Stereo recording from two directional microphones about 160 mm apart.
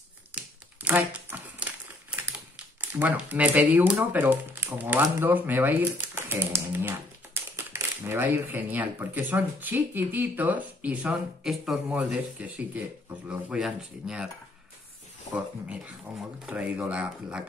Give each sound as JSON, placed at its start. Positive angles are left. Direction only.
{"t": 0.8, "sound": "typewriter", "side_deg": -10}
{"t": 5.0, "sound": "speech", "side_deg": -10}
{"t": 15.3, "sound": "speech", "side_deg": -10}